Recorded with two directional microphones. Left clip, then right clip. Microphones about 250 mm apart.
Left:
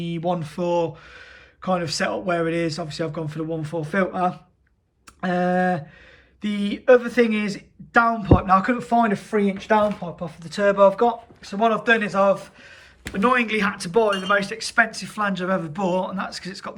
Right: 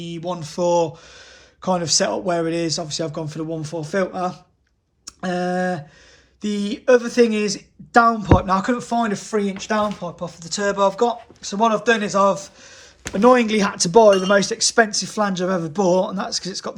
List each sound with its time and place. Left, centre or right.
0.0 s speech: centre
5.0 s a sound: centre
6.4 s speech: centre